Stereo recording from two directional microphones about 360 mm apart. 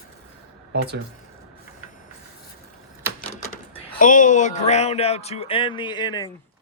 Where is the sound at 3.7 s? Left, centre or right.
Left.